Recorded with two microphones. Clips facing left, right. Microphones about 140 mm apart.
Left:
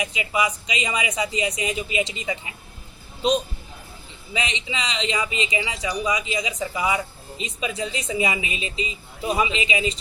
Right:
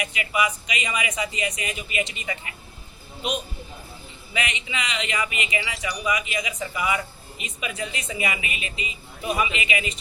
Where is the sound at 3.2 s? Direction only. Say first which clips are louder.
Left 7 dB; 30° left (ahead or behind).